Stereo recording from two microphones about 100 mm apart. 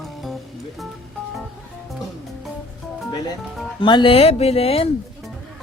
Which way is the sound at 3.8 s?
55° left (ahead or behind).